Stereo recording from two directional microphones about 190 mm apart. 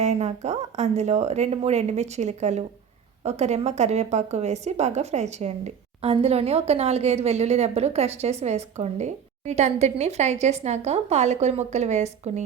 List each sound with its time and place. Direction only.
0.0 s speech: 35° right (ahead or behind)